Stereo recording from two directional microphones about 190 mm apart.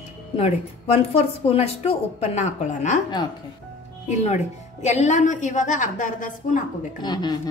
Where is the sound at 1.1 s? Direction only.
35° left (ahead or behind).